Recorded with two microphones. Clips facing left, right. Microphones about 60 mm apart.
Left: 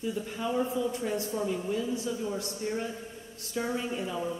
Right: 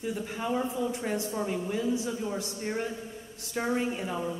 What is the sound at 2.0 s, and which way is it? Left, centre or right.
Speech, right.